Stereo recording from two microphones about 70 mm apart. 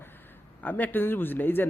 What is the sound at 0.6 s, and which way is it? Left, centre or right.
A man's voice, left.